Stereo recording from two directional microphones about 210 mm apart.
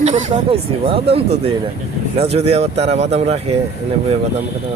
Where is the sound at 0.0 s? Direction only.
35° right (ahead or behind).